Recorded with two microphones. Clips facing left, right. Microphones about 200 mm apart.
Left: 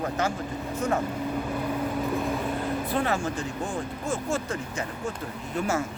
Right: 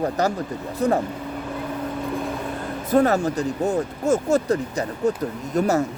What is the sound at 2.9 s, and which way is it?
Speech, 40° right (ahead or behind).